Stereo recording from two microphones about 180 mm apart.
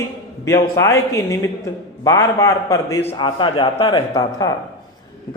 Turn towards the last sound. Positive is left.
turn(degrees=20)  # may be behind; listen again after turning